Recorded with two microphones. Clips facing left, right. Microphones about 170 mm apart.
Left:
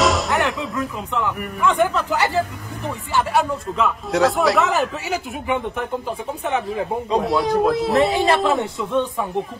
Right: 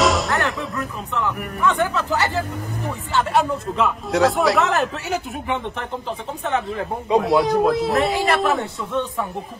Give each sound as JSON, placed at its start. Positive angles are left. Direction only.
{"t": 0.0, "sound": "music", "side_deg": 0}
{"t": 1.1, "sound": "speech", "side_deg": 15}
{"t": 3.3, "sound": "a man's voice", "side_deg": 0}
{"t": 7.2, "sound": "a man's voice", "side_deg": 0}
{"t": 8.1, "sound": "a man's voice", "side_deg": 20}